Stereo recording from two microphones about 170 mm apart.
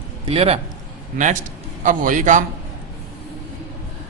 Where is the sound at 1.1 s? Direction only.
45° right (ahead or behind).